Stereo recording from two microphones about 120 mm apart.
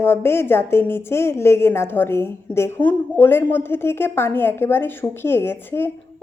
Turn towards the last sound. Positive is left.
turn(degrees=20)  # may be behind; listen again after turning